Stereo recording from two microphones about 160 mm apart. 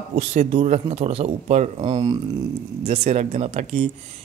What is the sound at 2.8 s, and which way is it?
Speech, 40° right (ahead or behind).